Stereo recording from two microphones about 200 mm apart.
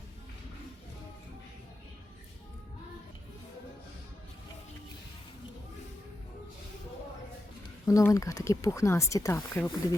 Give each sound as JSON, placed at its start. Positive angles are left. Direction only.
{"t": 7.9, "sound": "speech", "side_deg": 15}